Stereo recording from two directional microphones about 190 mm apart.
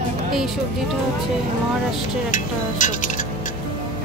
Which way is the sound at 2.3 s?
40° left (ahead or behind).